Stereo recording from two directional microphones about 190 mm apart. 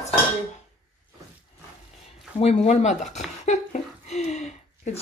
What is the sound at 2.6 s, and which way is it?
Speech, 40° left (ahead or behind).